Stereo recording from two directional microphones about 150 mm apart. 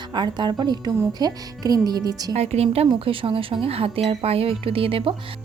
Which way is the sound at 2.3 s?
45° right (ahead or behind).